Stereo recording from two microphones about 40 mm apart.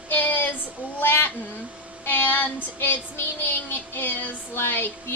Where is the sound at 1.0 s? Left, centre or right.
Left.